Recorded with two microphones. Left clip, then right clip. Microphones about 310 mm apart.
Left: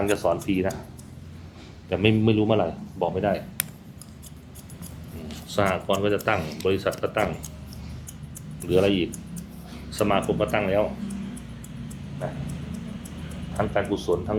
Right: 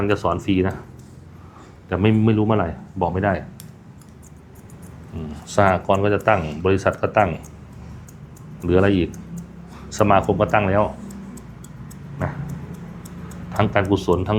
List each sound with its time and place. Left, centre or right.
0.0 s speech: centre
1.9 s speech: centre
5.5 s speech: right
8.6 s speech: right
13.6 s speech: right